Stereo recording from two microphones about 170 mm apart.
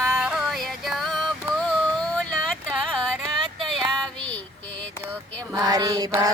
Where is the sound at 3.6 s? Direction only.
Centre (ahead or behind).